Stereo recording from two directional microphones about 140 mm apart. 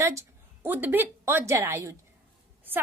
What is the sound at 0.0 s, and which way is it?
A woman's voice, 20° right (ahead or behind).